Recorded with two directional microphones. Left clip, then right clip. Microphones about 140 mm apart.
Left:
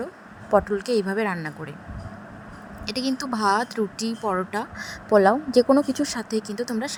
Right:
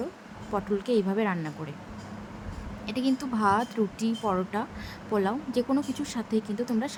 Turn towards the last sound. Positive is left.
turn(degrees=45)  # may be behind; listen again after turning